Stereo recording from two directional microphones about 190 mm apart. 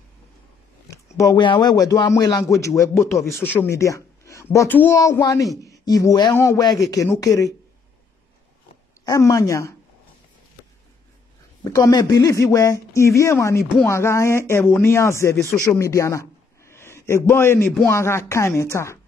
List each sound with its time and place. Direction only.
0.8 s speech: 15° left (ahead or behind)
9.0 s speech: 15° left (ahead or behind)
11.6 s speech: 20° left (ahead or behind)
15.6 s a sound: 15° left (ahead or behind)
17.6 s speech: 10° left (ahead or behind)